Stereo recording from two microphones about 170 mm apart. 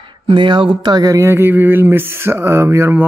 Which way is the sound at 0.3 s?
30° right (ahead or behind).